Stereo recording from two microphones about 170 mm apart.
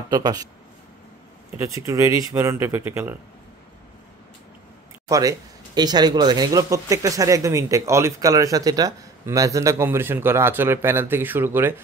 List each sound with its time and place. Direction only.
0.1 s speech: 25° right (ahead or behind)
1.6 s speech: 20° right (ahead or behind)
5.0 s speech: 20° right (ahead or behind)